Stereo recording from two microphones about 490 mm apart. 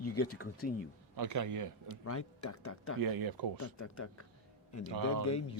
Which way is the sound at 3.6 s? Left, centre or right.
Left.